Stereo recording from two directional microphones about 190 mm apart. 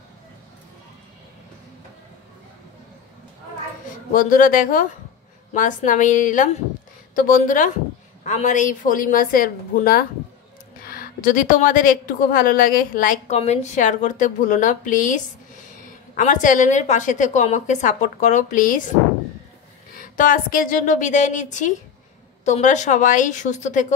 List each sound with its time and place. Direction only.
4.1 s a woman's voice: 45° left (ahead or behind)
20.0 s a woman's voice: 45° left (ahead or behind)